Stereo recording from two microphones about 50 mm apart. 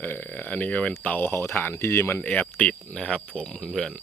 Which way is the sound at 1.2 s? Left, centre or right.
Left.